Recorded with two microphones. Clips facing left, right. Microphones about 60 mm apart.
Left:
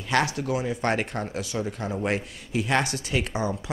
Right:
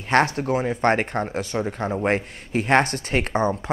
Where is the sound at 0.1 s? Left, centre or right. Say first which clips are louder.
Right 5 dB; right.